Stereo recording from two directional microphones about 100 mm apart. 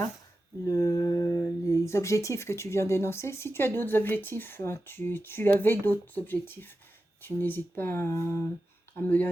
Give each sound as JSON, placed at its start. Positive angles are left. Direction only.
{"t": 0.7, "sound": "speech", "side_deg": 35}
{"t": 8.1, "sound": "humming", "side_deg": -30}
{"t": 9.0, "sound": "speech", "side_deg": 15}